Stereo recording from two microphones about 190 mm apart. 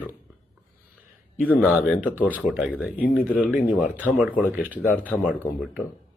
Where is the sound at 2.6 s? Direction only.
5° right (ahead or behind).